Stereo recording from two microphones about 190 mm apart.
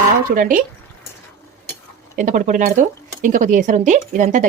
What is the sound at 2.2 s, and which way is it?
Speech, 40° right (ahead or behind).